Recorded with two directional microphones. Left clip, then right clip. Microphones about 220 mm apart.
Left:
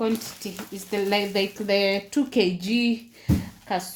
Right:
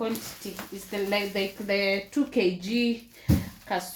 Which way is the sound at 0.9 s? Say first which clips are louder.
Left 4 dB; 45° left (ahead or behind).